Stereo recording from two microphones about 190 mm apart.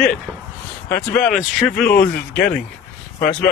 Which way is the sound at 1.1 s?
5° left (ahead or behind).